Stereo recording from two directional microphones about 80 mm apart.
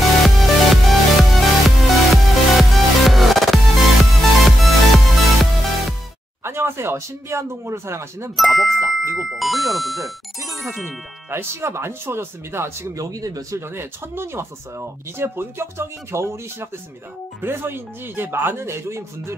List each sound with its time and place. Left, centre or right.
0.1 s music: centre
6.4 s speech: right
8.4 s speech: centre
10.9 s speech: right
12.9 s speech: right
13.6 s speech: right